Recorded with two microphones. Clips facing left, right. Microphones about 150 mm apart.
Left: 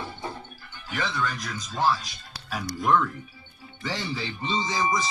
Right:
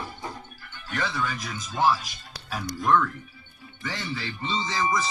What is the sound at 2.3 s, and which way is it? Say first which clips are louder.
Music: left 1 dB; centre (ahead or behind).